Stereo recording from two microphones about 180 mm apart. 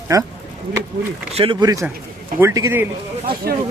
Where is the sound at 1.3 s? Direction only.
30° right (ahead or behind).